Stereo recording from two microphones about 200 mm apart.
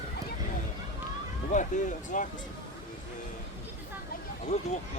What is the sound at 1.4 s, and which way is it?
Speech, 40° left (ahead or behind).